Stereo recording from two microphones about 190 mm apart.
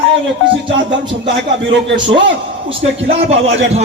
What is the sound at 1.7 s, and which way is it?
Speech, 70° right (ahead or behind).